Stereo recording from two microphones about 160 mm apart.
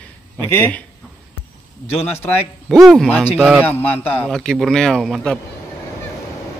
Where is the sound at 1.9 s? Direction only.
40° left (ahead or behind).